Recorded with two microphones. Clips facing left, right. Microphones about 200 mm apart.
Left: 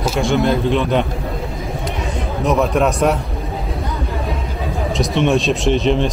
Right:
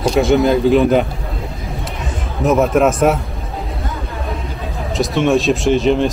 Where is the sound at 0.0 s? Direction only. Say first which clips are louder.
Right 4 dB; centre (ahead or behind).